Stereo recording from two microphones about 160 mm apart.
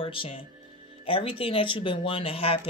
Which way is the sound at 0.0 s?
35° left (ahead or behind).